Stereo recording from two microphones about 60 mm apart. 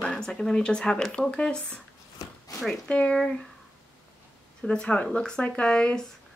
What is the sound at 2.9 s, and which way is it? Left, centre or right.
Speech, centre.